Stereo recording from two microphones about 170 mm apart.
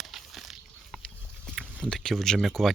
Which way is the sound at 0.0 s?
Centre (ahead or behind).